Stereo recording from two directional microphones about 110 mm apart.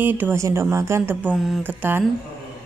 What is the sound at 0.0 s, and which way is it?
Speech, 20° right (ahead or behind).